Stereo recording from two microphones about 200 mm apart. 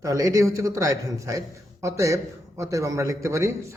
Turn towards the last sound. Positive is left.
turn(degrees=-15)  # may be behind; listen again after turning